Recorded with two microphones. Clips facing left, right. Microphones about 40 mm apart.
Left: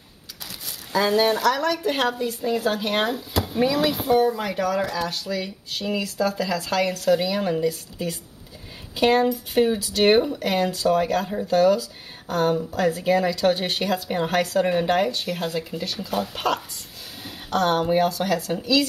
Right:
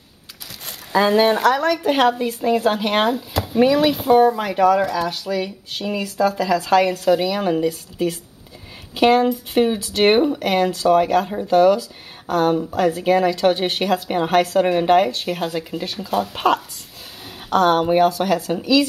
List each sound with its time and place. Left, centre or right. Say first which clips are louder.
0.9 s speech: right 4 dB; right
3.1 s speech: right 4 dB; centre
3.5 s speech: right 6 dB; right
15.3 s speech: right 3 dB; centre; by 18.6 s right